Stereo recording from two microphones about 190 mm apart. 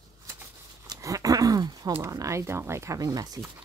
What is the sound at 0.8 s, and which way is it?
Speech, 20° right (ahead or behind).